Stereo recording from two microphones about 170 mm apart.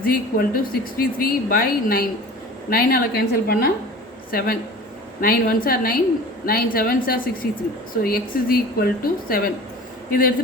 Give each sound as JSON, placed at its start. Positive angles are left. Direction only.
{"t": 0.0, "sound": "a man's voice", "side_deg": 60}